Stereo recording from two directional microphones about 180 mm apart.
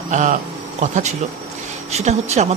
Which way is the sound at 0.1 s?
45° right (ahead or behind).